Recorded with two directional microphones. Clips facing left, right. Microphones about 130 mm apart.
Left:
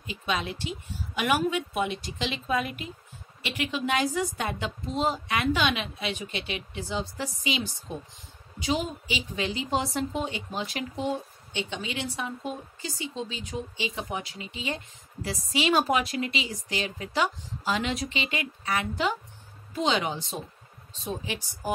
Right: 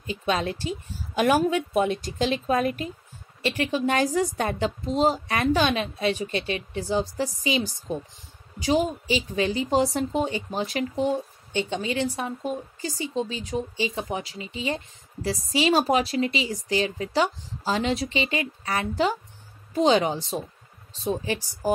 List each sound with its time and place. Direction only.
0.1 s a woman's voice: 40° right (ahead or behind)
8.6 s a woman's voice: 35° right (ahead or behind)